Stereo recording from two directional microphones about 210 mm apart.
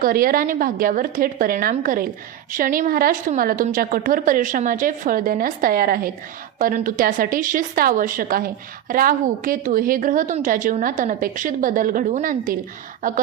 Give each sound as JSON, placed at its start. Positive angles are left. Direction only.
{"t": 0.0, "sound": "a woman's voice", "side_deg": -45}